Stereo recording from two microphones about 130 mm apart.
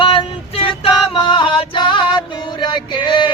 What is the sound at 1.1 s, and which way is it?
Music, 40° left (ahead or behind).